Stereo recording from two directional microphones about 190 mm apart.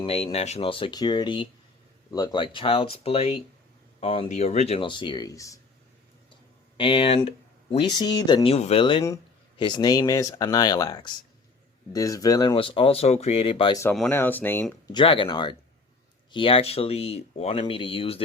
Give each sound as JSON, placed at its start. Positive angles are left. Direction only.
{"t": 0.0, "sound": "speech", "side_deg": 30}
{"t": 6.7, "sound": "speech", "side_deg": 30}
{"t": 13.9, "sound": "speech", "side_deg": 5}
{"t": 14.9, "sound": "speech", "side_deg": 25}